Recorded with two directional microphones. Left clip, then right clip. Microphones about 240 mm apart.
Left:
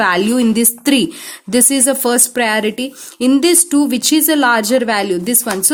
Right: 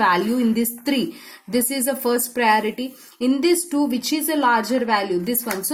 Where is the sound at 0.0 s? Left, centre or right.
Left.